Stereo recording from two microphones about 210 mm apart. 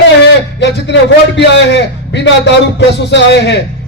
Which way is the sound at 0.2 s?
55° left (ahead or behind).